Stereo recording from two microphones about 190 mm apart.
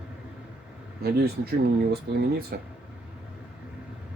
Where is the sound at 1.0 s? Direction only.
55° right (ahead or behind).